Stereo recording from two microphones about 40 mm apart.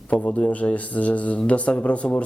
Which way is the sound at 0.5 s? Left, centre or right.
Left.